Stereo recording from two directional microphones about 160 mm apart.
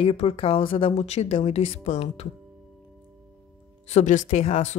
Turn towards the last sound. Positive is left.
turn(degrees=45)  # may be behind; listen again after turning